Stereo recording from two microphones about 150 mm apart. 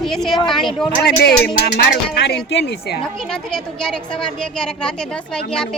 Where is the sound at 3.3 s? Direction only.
5° left (ahead or behind).